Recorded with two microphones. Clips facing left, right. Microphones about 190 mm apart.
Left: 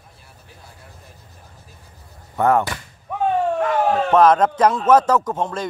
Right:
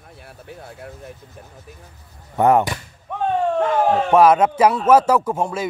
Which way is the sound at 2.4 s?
20° right (ahead or behind).